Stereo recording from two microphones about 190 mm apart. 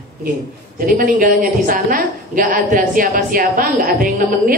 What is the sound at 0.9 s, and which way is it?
A woman's voice, 45° right (ahead or behind).